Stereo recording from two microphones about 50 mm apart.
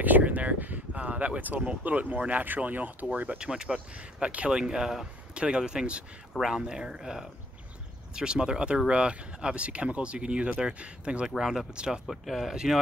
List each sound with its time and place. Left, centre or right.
0.0 s a sound: right
1.8 s speech: right
3.3 s speech: centre
4.5 s speech: centre
11.2 s speech: centre
12.1 s speech: centre